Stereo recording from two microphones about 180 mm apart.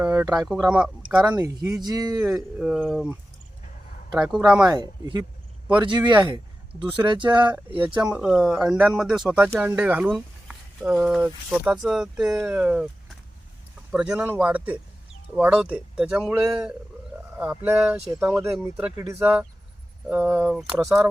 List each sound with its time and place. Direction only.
0.0 s speech: 10° right (ahead or behind)
1.4 s speech: 20° right (ahead or behind)
2.2 s speech: 5° right (ahead or behind)
4.2 s speech: 5° right (ahead or behind)
4.6 s speech: 25° right (ahead or behind)
6.0 s speech: 10° right (ahead or behind)
6.9 s speech: 25° right (ahead or behind)
8.1 s speech: 5° right (ahead or behind)
13.9 s speech: 5° right (ahead or behind)